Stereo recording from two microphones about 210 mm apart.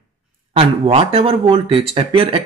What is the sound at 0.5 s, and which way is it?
Speech, 30° right (ahead or behind).